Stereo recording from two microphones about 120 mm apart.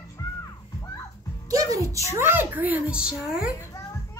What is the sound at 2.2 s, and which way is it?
A child's voice, 15° right (ahead or behind).